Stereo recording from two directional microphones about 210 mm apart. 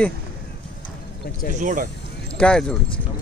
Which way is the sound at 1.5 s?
40° right (ahead or behind).